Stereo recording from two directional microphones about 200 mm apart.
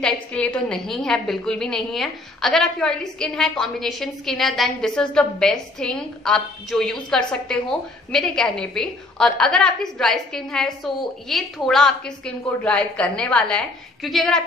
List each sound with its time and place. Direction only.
0.0 s a woman's voice: 5° left (ahead or behind)